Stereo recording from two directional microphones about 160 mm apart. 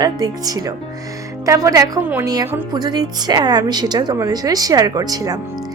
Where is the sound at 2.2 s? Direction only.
25° right (ahead or behind).